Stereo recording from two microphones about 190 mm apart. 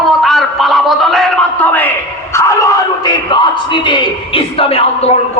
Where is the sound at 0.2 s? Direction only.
Centre (ahead or behind).